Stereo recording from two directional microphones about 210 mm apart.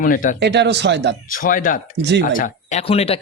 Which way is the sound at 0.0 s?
40° left (ahead or behind).